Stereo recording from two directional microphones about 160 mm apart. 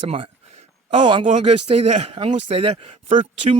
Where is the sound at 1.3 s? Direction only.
40° right (ahead or behind).